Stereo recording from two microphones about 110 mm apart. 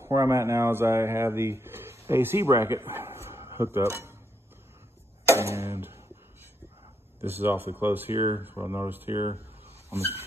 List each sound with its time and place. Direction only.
0.0 s speech: 25° right (ahead or behind)
5.3 s speech: 25° right (ahead or behind)
7.2 s speech: 20° right (ahead or behind)
9.8 s dog: 20° right (ahead or behind)